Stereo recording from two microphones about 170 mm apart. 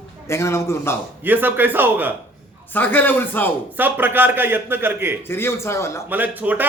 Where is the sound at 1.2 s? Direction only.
10° right (ahead or behind).